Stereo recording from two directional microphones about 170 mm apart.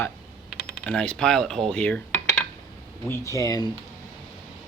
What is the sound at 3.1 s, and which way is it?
Speech, 20° left (ahead or behind).